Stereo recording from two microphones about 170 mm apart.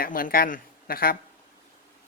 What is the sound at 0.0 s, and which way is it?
Speech, 55° left (ahead or behind).